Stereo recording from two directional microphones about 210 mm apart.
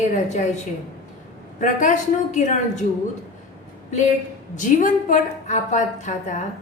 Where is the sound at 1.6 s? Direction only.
40° left (ahead or behind).